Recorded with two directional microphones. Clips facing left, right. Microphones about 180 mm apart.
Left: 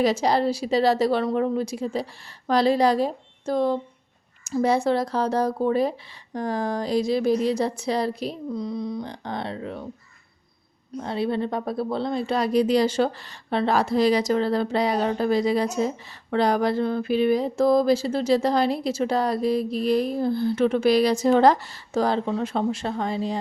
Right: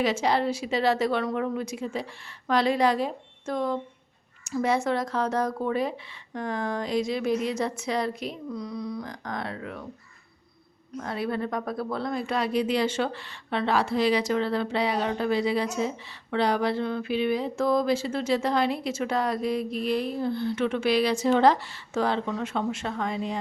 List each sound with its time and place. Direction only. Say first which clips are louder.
0.0 s speech: left 4 dB; 35° left (ahead or behind)
10.9 s speech: left 4 dB; 25° left (ahead or behind)